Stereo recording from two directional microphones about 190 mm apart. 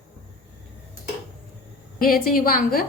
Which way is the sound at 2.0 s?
50° left (ahead or behind).